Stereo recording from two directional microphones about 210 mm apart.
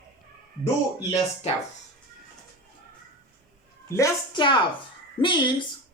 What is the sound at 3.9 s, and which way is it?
Speech, 15° left (ahead or behind).